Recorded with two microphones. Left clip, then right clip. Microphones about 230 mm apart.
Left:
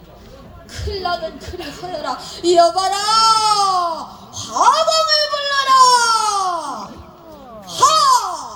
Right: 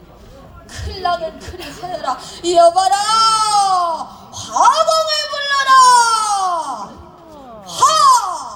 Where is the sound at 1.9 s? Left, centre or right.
Right.